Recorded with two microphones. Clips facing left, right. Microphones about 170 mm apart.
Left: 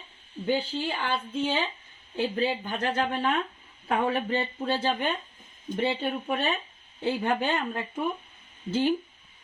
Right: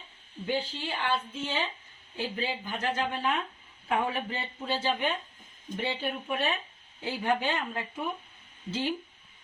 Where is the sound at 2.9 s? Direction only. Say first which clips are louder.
Left 4 dB; 55° left (ahead or behind).